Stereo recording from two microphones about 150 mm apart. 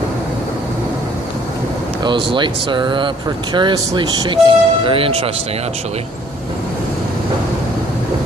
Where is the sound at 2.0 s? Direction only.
35° right (ahead or behind).